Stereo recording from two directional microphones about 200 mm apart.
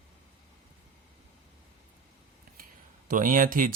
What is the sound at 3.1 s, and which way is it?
Speech, 40° right (ahead or behind).